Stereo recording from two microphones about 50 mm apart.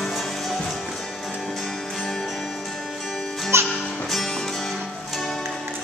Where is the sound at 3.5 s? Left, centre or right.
Right.